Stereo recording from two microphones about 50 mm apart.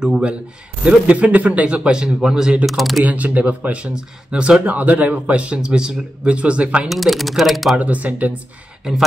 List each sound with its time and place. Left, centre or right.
0.8 s a man's voice: right
1.8 s speech: centre
2.6 s speech: centre
3.1 s a man's voice: right
6.9 s speech: centre
7.7 s a man's voice: right